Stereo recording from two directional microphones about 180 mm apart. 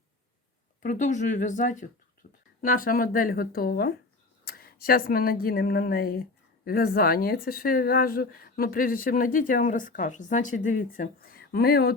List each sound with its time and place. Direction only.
0.8 s speech: 45° left (ahead or behind)
2.2 s a sound: 50° left (ahead or behind)
2.6 s speech: 50° left (ahead or behind)